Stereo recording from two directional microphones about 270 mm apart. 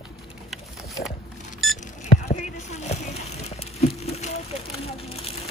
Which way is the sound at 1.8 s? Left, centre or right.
Left.